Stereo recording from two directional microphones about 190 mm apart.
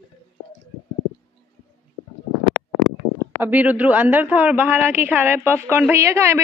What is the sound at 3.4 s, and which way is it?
A woman's voice, 10° right (ahead or behind).